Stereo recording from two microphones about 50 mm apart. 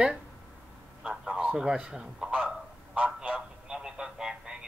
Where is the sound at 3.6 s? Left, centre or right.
Centre.